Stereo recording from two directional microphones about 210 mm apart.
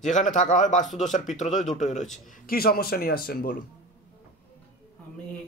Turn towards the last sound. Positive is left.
turn(degrees=45)  # may be behind; listen again after turning